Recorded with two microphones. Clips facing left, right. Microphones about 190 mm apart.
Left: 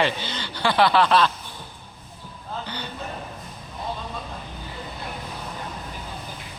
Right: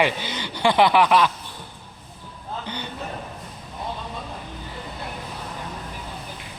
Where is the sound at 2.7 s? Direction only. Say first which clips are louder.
Right 1 dB; 20° right (ahead or behind).